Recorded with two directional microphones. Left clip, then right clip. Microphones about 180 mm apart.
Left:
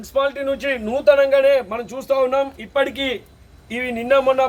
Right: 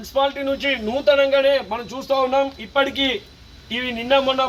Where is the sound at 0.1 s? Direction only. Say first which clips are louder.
Even; 15° left (ahead or behind).